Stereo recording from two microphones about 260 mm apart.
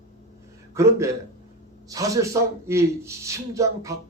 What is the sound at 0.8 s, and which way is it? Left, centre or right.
Speech, centre.